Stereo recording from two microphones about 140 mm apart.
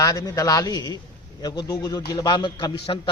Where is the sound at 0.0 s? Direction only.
30° left (ahead or behind).